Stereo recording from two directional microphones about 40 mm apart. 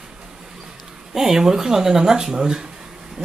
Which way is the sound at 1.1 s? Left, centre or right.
Centre.